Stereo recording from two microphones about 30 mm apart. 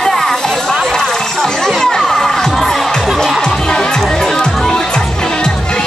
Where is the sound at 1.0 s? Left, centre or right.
Centre.